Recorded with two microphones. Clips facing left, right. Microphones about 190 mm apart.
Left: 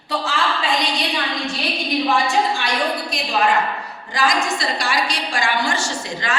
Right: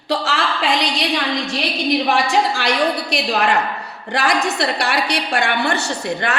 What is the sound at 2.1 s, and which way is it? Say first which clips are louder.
A woman's voice: right 1 dB; 80° right.